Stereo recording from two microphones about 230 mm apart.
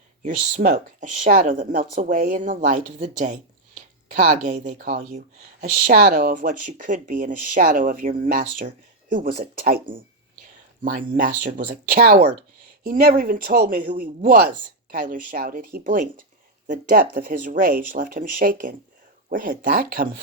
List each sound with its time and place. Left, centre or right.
0.2 s speech: right
10.8 s speech: right